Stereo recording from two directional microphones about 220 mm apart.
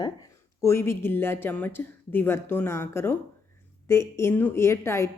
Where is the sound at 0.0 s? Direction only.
15° left (ahead or behind).